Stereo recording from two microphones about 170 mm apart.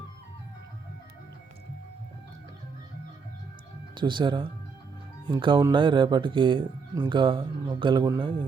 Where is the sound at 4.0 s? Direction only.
25° right (ahead or behind).